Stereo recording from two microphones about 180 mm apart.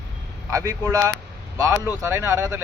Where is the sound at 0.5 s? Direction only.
20° right (ahead or behind).